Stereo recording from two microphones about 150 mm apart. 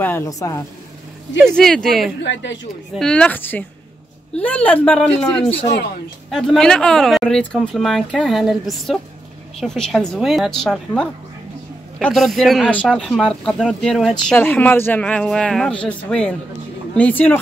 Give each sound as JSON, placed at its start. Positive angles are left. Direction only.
{"t": 0.0, "sound": "speech", "side_deg": 15}
{"t": 1.4, "sound": "speech", "side_deg": 5}